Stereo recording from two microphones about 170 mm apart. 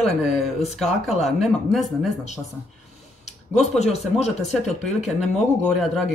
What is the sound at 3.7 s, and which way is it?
Speech, 40° left (ahead or behind).